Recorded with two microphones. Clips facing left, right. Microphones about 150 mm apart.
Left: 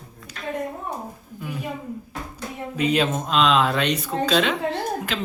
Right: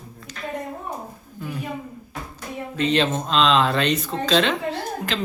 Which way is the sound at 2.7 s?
10° left (ahead or behind).